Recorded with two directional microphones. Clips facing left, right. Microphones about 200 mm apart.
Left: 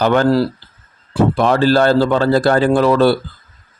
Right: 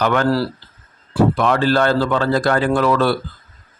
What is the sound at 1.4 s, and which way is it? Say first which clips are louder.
Speech: left 3 dB; 35° left (ahead or behind).